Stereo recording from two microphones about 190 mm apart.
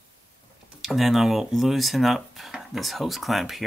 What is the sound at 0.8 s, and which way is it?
Speech, centre (ahead or behind).